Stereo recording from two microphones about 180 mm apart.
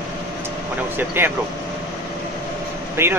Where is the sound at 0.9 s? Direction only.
10° right (ahead or behind).